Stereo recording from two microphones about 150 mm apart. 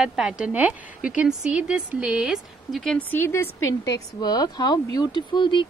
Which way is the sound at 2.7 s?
5° left (ahead or behind).